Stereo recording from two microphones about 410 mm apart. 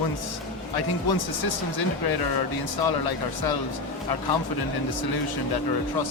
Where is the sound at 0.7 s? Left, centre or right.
Left.